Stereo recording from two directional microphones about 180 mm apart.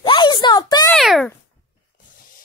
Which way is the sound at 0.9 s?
Centre (ahead or behind).